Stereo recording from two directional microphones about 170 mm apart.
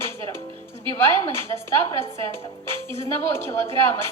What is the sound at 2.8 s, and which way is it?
A woman's voice, 15° left (ahead or behind).